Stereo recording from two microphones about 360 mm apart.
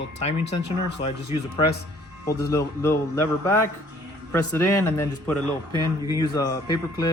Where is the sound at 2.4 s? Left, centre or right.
Centre.